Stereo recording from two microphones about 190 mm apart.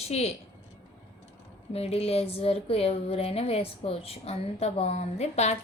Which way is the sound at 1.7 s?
30° left (ahead or behind).